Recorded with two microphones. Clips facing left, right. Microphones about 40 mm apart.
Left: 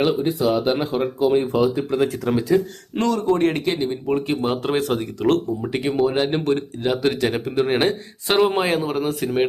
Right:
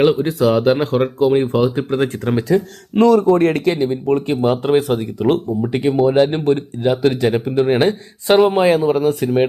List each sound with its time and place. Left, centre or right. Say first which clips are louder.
0.2 s speech: right 4 dB; right
0.5 s speech: right 6 dB; right
0.9 s speech: right 4 dB; right
2.5 s speech: right 2 dB; centre
4.1 s speech: right 3 dB; right
4.5 s speech: right 5 dB; centre